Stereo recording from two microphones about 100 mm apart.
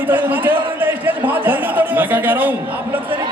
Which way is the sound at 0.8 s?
20° right (ahead or behind).